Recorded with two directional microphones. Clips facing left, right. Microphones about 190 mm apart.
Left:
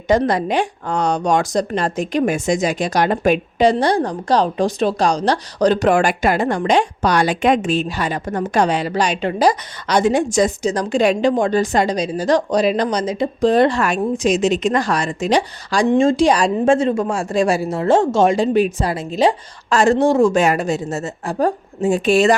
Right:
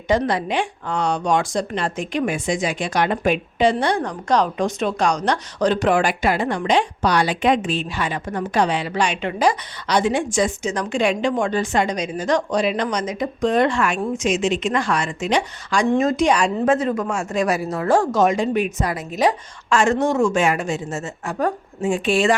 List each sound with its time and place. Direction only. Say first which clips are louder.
0.1 s speech: left 4 dB; 45° left (ahead or behind)